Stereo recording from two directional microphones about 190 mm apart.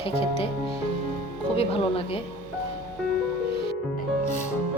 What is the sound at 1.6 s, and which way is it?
Speech, 30° left (ahead or behind).